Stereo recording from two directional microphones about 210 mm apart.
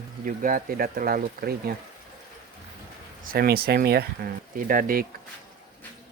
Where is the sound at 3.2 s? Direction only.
45° right (ahead or behind).